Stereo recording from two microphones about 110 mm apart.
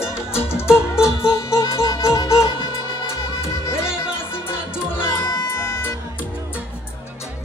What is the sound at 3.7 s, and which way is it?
Music, 20° left (ahead or behind).